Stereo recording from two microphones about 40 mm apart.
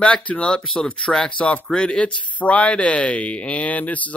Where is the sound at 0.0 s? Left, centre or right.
Left.